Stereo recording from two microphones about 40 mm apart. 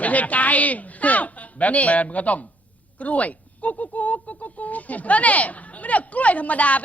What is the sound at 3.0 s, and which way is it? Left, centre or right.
Speech, left.